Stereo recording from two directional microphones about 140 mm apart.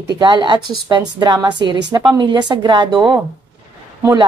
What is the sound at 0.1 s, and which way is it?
A woman's voice, 30° right (ahead or behind).